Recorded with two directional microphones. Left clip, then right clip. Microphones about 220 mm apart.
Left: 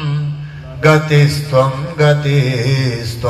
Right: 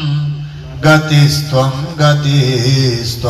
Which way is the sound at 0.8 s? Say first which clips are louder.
Right 1 dB; 15° left (ahead or behind).